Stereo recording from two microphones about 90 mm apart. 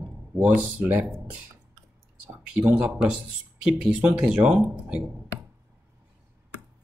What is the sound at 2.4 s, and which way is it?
Speech, 15° right (ahead or behind).